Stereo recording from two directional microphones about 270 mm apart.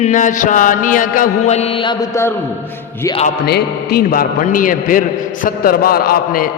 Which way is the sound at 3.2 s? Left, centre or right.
Left.